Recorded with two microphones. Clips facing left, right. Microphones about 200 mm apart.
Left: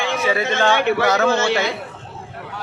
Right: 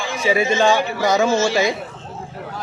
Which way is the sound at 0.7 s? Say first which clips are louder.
Left 2 dB; 65° left (ahead or behind).